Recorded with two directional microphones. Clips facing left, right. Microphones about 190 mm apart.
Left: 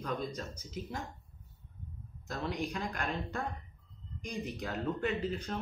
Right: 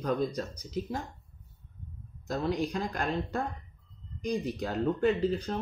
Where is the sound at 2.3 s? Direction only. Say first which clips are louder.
Right 6 dB; 35° right (ahead or behind).